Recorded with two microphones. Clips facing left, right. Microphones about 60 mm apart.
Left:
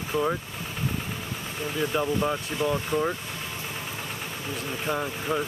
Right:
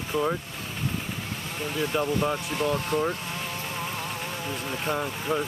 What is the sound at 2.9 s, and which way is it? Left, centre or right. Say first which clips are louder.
Speech: even; right.